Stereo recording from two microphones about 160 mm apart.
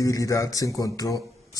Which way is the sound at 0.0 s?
20° left (ahead or behind).